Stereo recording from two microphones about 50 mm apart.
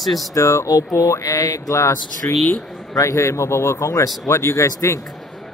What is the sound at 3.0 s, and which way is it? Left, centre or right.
Speech, left.